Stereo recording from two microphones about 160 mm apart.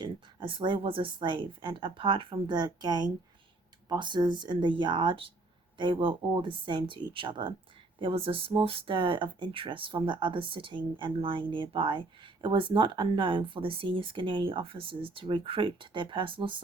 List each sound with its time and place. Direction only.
0.0 s speech: 30° right (ahead or behind)